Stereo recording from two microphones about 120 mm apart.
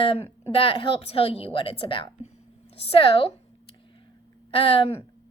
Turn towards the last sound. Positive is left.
turn(degrees=50)  # may be behind; listen again after turning